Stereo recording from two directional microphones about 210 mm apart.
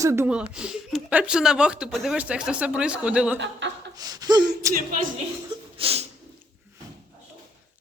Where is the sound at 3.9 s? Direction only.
15° right (ahead or behind).